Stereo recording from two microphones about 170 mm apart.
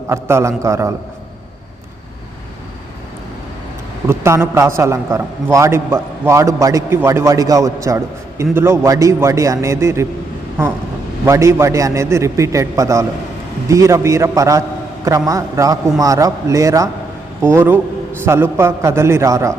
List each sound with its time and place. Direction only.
0.1 s a man's voice: 15° right (ahead or behind)
4.0 s a man's voice: 15° right (ahead or behind)
11.3 s a man's voice: 15° right (ahead or behind)